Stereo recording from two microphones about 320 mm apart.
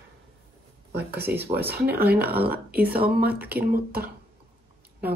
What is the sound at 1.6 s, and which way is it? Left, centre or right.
Speech, right.